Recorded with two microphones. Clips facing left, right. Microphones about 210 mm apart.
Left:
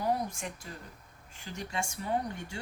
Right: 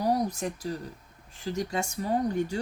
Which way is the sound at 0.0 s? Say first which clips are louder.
Right 5 dB; 40° right (ahead or behind).